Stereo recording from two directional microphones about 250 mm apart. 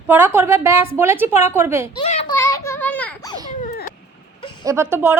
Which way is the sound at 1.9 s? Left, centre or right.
Left.